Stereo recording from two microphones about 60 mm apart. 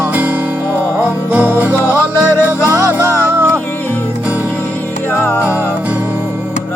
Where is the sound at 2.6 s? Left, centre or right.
Right.